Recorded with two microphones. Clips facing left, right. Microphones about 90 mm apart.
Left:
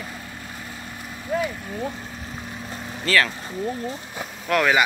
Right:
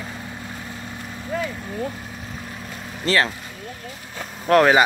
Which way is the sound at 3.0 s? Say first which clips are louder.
Right 1 dB; 25° right (ahead or behind).